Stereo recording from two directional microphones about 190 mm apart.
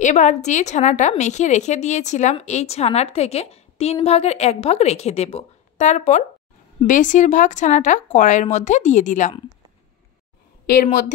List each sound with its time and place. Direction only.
0.0 s a woman's voice: 40° left (ahead or behind)